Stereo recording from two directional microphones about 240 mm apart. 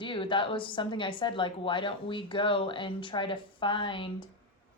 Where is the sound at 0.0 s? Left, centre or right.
Left.